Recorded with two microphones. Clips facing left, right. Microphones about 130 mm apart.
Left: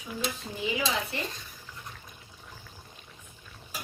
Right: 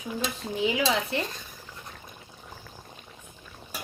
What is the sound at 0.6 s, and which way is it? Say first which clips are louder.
Speech: right 5 dB; 70° right (ahead or behind).